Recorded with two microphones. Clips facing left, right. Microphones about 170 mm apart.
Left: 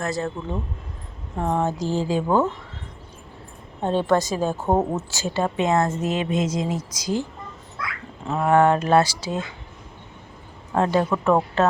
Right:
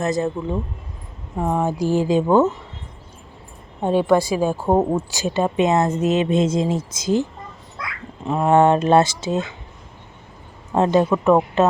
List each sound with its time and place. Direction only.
0.0 s speech: 20° right (ahead or behind)
1.4 s a woman's voice: 10° right (ahead or behind)
3.8 s a woman's voice: 10° right (ahead or behind)
8.4 s speech: 25° right (ahead or behind)
10.7 s speech: 20° right (ahead or behind)